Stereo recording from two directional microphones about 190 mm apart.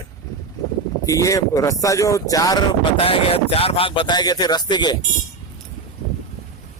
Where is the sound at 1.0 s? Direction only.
15° left (ahead or behind).